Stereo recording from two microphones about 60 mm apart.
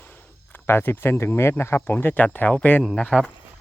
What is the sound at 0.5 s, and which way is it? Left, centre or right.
Speech, left.